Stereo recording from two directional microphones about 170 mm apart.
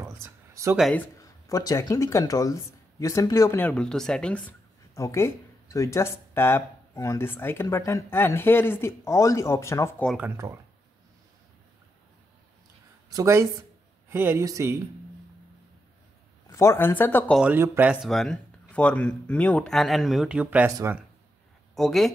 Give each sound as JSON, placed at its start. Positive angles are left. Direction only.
{"t": 0.0, "sound": "a sound", "side_deg": -15}
{"t": 0.9, "sound": "speech", "side_deg": 20}
{"t": 4.9, "sound": "speech", "side_deg": 15}
{"t": 10.0, "sound": "speech", "side_deg": -5}
{"t": 10.3, "sound": "speech", "side_deg": -15}
{"t": 13.1, "sound": "speech", "side_deg": -20}
{"t": 16.5, "sound": "speech", "side_deg": 15}
{"t": 17.4, "sound": "speech", "side_deg": -10}
{"t": 18.0, "sound": "speech", "side_deg": 5}
{"t": 21.7, "sound": "speech", "side_deg": 0}